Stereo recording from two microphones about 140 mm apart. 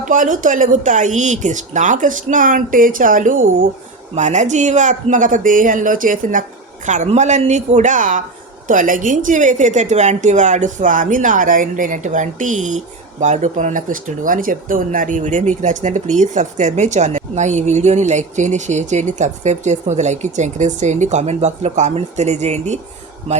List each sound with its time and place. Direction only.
0.0 s speech: 70° right (ahead or behind)
4.1 s speech: 60° right (ahead or behind)
6.8 s a woman's voice: 60° right (ahead or behind)